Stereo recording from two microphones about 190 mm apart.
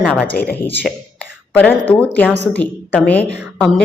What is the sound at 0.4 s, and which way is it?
Speech, 50° left (ahead or behind).